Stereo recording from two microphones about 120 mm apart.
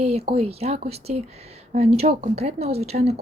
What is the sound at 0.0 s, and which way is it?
Speech, 60° right (ahead or behind).